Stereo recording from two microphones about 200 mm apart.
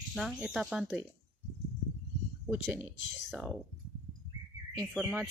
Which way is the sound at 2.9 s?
65° left (ahead or behind).